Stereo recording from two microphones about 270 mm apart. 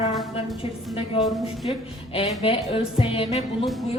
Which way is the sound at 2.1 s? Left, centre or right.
Left.